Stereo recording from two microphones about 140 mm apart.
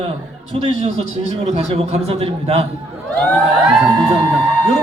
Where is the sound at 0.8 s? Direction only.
50° right (ahead or behind).